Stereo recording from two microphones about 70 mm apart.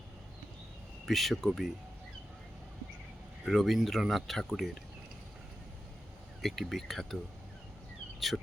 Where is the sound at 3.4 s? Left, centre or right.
Centre.